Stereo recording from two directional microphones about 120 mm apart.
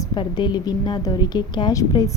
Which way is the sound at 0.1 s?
40° left (ahead or behind).